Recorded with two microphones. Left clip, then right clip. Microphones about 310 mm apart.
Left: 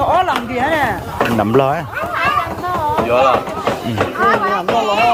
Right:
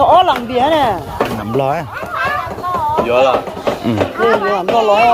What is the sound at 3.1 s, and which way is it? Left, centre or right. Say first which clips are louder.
Speech: right 1 dB; right.